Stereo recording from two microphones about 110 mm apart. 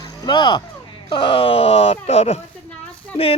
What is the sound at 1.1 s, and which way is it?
Speech, 50° left (ahead or behind).